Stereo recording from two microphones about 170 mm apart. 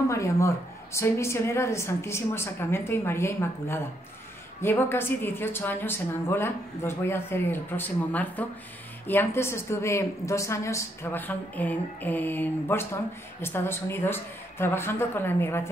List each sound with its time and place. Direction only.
0.1 s a woman's voice: 20° left (ahead or behind)